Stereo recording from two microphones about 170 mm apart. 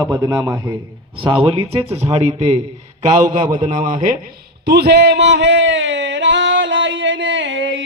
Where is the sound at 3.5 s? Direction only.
50° right (ahead or behind).